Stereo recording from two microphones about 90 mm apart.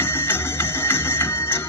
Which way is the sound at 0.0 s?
25° left (ahead or behind).